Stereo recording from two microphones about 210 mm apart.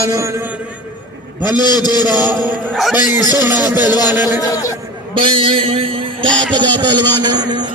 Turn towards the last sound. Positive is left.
turn(degrees=-20)  # may be behind; listen again after turning